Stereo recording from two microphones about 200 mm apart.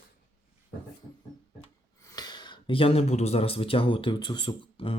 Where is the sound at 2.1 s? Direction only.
20° left (ahead or behind).